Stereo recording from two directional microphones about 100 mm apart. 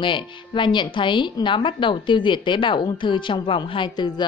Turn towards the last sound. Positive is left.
turn(degrees=50)  # may be behind; listen again after turning